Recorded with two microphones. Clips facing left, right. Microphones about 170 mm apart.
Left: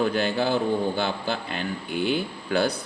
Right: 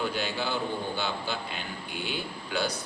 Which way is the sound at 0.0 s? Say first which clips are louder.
Left 7 dB; 50° left (ahead or behind).